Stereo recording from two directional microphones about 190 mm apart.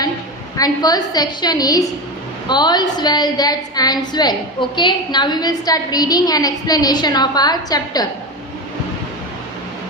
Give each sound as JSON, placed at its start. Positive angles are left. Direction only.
{"t": 0.5, "sound": "a woman's voice", "side_deg": 20}